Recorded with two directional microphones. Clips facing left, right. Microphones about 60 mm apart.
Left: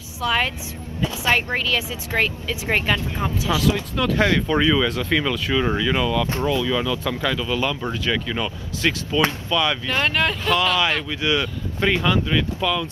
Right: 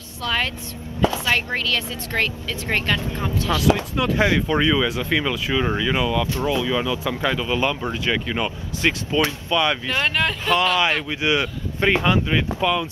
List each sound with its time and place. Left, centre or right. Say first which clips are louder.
0.2 s speech: left 2 dB; centre
3.6 s speech: right 1 dB; centre